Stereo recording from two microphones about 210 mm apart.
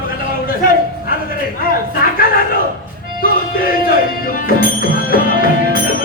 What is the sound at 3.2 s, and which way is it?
Music, 45° left (ahead or behind).